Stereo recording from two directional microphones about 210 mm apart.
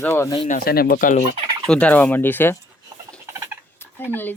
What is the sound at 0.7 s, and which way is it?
Speech, 45° left (ahead or behind).